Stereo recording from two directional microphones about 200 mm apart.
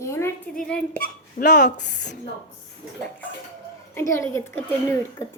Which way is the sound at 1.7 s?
60° left (ahead or behind).